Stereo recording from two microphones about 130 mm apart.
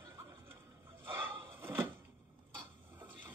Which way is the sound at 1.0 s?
15° right (ahead or behind).